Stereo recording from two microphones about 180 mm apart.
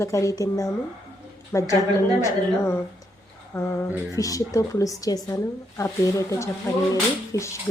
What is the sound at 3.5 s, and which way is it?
A woman's voice, 15° left (ahead or behind).